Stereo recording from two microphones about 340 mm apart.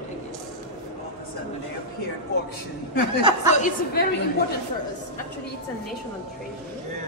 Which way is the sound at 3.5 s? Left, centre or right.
Left.